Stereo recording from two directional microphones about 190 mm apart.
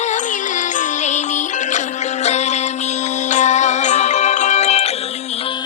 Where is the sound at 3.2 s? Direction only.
40° left (ahead or behind).